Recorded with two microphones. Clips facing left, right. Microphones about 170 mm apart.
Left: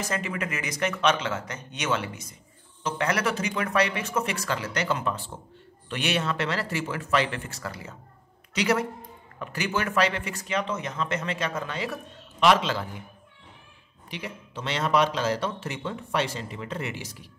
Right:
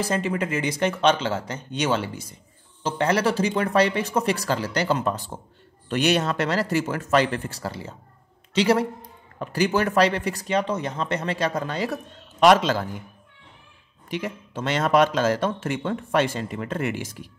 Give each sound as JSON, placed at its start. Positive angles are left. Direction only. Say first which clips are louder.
{"t": 0.0, "sound": "speech", "louder": "right 6 dB", "side_deg": -30}
{"t": 14.1, "sound": "a man's voice", "louder": "right 7 dB", "side_deg": -50}